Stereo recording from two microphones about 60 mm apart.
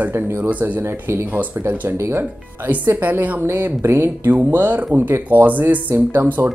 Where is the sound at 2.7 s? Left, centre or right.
Right.